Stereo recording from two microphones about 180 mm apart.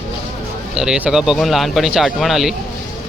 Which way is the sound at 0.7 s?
5° right (ahead or behind).